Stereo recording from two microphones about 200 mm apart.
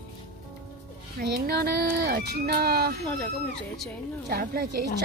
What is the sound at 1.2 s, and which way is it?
A woman's voice, 50° right (ahead or behind).